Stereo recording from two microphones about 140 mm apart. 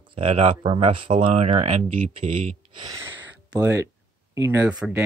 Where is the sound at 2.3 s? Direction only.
40° right (ahead or behind).